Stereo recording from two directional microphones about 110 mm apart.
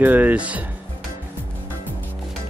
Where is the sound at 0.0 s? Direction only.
15° right (ahead or behind).